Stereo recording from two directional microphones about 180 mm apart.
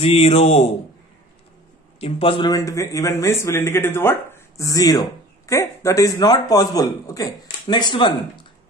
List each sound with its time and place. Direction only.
0.0 s a man's voice: 35° left (ahead or behind)
2.0 s a man's voice: 35° left (ahead or behind)